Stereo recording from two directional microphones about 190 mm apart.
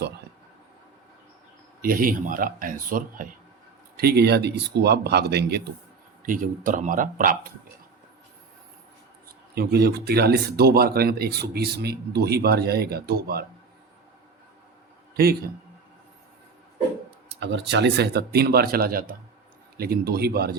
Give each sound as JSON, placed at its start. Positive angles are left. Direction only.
{"t": 1.8, "sound": "speech", "side_deg": -50}
{"t": 3.9, "sound": "speech", "side_deg": -55}
{"t": 6.2, "sound": "speech", "side_deg": -45}
{"t": 9.6, "sound": "speech", "side_deg": -55}
{"t": 15.1, "sound": "a man's voice", "side_deg": -55}
{"t": 17.4, "sound": "speech", "side_deg": -65}